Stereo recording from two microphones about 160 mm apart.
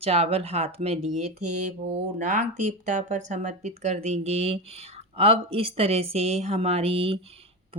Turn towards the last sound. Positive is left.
turn(degrees=-35)  # may be behind; listen again after turning